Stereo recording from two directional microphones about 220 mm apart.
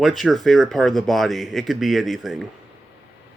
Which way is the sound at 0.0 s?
Centre (ahead or behind).